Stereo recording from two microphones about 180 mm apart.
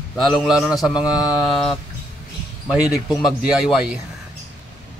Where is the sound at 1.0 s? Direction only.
20° left (ahead or behind).